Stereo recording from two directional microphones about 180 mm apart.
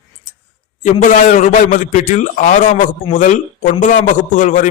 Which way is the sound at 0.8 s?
45° left (ahead or behind).